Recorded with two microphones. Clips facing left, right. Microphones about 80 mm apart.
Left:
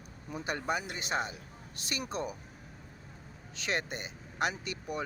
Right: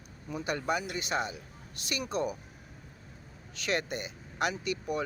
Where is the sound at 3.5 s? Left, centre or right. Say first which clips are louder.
Right 3 dB; left.